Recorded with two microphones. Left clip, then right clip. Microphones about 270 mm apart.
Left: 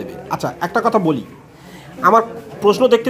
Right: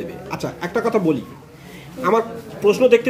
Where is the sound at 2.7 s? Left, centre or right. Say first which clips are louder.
Left 1 dB; centre.